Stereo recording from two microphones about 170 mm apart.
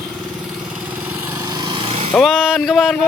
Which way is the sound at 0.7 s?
10° right (ahead or behind).